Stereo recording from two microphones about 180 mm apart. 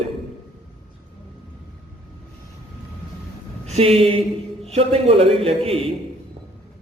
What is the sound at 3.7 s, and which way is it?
A man's voice, 35° right (ahead or behind).